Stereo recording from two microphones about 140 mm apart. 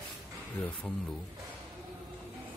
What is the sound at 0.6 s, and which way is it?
Speech, 5° left (ahead or behind).